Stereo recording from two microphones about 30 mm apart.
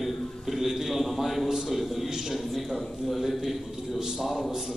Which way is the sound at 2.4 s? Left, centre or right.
Centre.